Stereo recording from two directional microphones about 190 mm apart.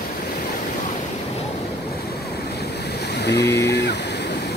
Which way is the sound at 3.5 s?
60° left (ahead or behind).